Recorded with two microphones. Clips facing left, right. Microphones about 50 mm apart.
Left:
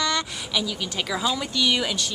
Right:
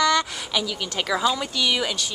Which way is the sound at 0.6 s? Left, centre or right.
Centre.